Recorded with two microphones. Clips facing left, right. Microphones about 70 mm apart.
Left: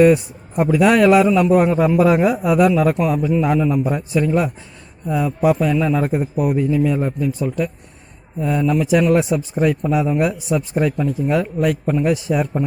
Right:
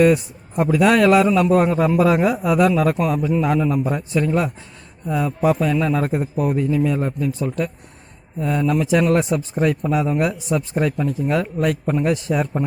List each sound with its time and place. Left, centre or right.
0.0 s a man's voice: centre
10.2 s a man's voice: centre